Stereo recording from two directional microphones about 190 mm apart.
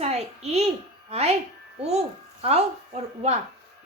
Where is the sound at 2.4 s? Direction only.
35° right (ahead or behind).